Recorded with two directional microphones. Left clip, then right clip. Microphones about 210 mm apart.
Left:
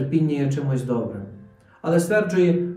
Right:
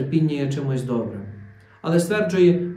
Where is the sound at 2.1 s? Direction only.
10° right (ahead or behind).